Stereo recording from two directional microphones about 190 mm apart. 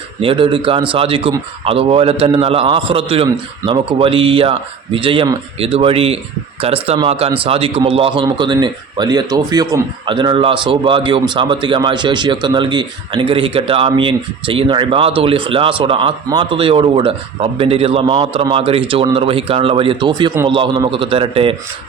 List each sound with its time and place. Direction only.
0.2 s a man's voice: 30° right (ahead or behind)